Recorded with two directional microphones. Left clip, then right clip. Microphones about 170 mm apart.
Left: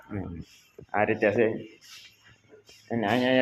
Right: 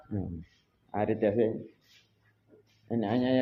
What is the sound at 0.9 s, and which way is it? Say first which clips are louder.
Speech: left 4 dB; 25° right (ahead or behind).